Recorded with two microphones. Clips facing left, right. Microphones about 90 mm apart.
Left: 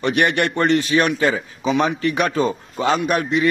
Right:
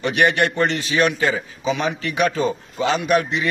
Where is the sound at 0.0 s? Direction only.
55° left (ahead or behind).